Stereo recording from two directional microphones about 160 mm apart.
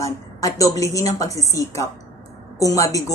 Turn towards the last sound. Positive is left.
turn(degrees=20)  # may be behind; listen again after turning